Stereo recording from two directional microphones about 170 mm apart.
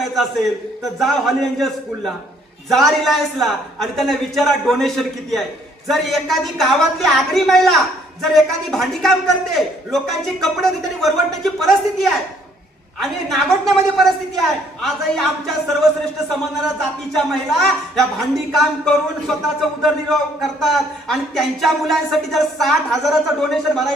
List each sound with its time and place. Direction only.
0.9 s a man's voice: centre (ahead or behind)
17.2 s a man's voice: centre (ahead or behind)